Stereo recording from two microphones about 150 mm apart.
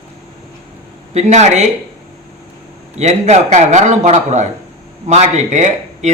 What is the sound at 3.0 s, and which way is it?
Speech, 50° right (ahead or behind).